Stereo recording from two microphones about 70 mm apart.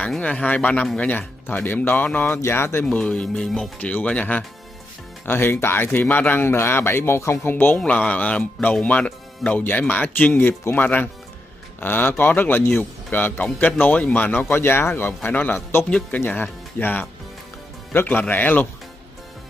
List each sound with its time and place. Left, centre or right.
0.2 s speech: centre; by 2.8 s left
2.8 s speech: centre
5.2 s speech: left
7.5 s speech: left
7.8 s speech: centre